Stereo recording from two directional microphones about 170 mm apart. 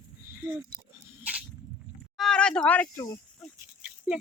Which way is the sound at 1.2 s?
10° right (ahead or behind).